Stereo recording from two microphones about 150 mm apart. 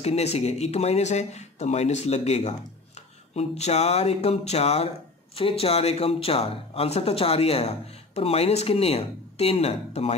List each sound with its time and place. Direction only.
0.0 s speech: 45° left (ahead or behind)